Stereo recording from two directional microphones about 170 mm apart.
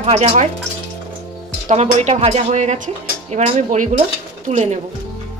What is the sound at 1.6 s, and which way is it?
Speech, 40° right (ahead or behind).